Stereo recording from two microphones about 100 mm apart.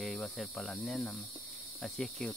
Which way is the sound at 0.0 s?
Centre (ahead or behind).